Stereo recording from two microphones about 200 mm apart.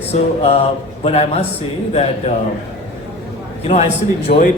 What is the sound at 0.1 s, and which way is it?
Speech, 30° left (ahead or behind).